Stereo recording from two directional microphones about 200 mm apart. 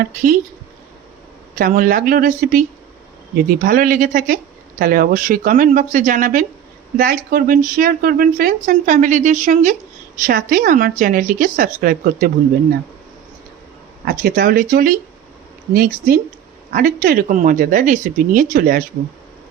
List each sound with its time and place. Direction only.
1.5 s speech: 45° right (ahead or behind)
14.0 s speech: 45° right (ahead or behind)